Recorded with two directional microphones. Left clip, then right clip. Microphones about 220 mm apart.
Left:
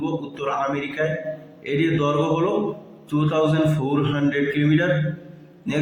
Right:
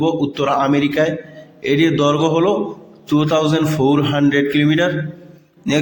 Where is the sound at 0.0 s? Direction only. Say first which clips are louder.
Right 9 dB; 45° right (ahead or behind).